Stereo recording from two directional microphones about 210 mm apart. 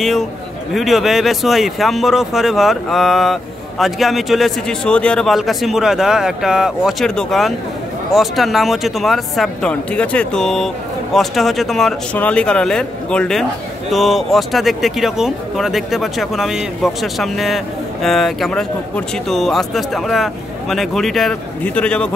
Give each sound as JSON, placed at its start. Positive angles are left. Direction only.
{"t": 0.7, "sound": "speech", "side_deg": 0}